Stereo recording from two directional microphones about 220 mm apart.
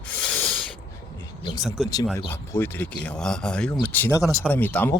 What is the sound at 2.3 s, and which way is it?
Speech, 10° left (ahead or behind).